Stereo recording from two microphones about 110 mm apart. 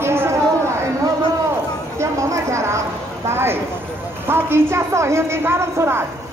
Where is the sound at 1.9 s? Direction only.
30° right (ahead or behind).